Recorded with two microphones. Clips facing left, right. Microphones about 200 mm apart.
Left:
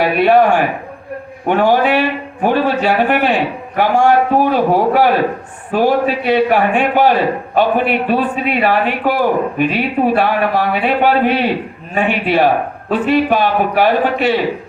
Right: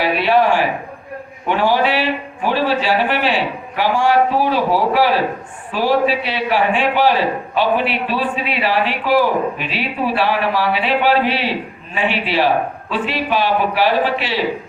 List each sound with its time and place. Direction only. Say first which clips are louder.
0.0 s a man's voice: left 4 dB; 50° left (ahead or behind)